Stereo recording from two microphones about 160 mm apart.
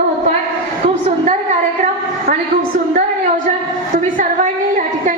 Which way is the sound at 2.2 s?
65° right (ahead or behind).